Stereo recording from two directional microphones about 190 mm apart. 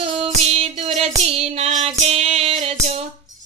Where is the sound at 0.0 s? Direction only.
30° right (ahead or behind).